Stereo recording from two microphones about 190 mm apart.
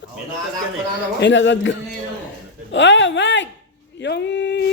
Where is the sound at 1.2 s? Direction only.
75° left (ahead or behind).